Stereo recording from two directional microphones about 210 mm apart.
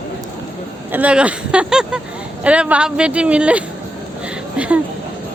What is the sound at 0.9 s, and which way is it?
Speech, 5° right (ahead or behind).